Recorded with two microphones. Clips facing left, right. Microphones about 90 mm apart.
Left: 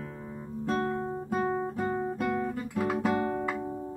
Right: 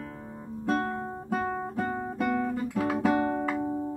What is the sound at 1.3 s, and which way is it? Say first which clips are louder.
Guitar: even; 5° left (ahead or behind).